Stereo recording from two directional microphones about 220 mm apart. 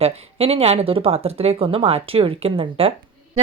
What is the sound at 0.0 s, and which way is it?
Speech, 25° right (ahead or behind).